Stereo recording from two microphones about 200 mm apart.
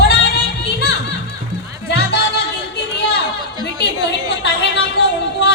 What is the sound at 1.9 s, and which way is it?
Music, 55° left (ahead or behind).